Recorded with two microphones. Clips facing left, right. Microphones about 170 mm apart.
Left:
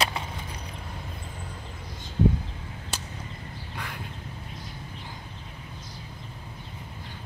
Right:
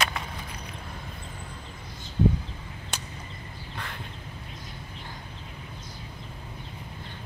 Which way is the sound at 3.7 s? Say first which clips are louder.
Left 1 dB; 10° left (ahead or behind).